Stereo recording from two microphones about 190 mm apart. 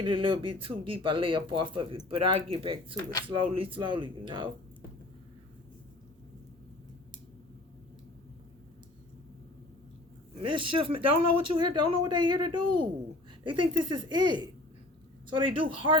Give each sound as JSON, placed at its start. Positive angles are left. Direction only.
{"t": 0.0, "sound": "speech", "side_deg": -25}
{"t": 2.9, "sound": "speech", "side_deg": 20}
{"t": 3.2, "sound": "speech", "side_deg": -30}
{"t": 10.4, "sound": "speech", "side_deg": -25}